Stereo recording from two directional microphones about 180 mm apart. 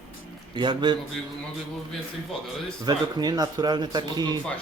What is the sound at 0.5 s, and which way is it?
Speech, 25° right (ahead or behind).